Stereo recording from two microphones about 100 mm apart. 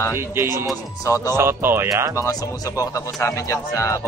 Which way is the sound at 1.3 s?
25° right (ahead or behind).